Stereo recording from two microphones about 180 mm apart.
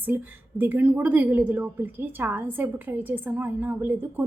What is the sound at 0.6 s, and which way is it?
A woman's voice, 10° right (ahead or behind).